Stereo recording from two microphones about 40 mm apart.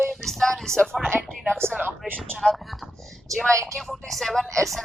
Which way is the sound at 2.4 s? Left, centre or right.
Centre.